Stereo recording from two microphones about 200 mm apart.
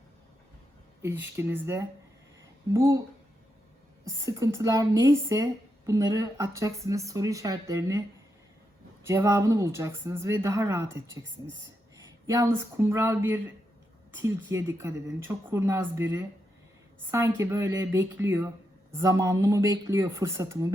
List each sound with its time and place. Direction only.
1.0 s speech: 10° right (ahead or behind)
4.0 s speech: 15° right (ahead or behind)
9.0 s speech: 15° right (ahead or behind)
11.2 s speech: 25° left (ahead or behind)
12.3 s speech: 15° right (ahead or behind)
17.1 s speech: 15° right (ahead or behind)